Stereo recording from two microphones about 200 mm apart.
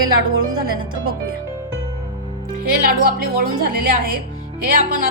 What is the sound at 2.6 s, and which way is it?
Speech, 45° right (ahead or behind).